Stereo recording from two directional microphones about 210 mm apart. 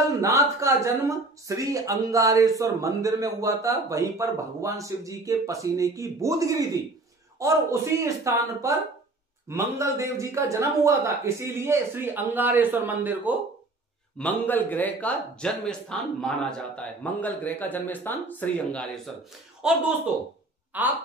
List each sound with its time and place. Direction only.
0.2 s speech: 15° right (ahead or behind)
14.1 s speech: 10° left (ahead or behind); by 20.9 s 10° right (ahead or behind)